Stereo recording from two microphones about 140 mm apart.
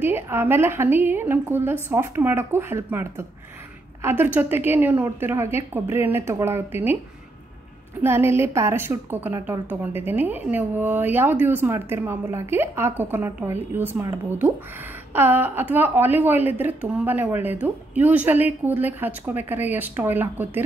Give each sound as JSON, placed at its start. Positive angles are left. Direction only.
{"t": 0.0, "sound": "a woman's voice", "side_deg": -15}
{"t": 8.0, "sound": "a woman's voice", "side_deg": -15}